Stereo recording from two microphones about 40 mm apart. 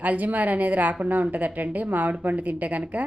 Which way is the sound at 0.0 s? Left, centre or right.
Right.